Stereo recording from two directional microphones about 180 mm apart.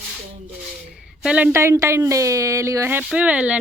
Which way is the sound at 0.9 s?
5° right (ahead or behind).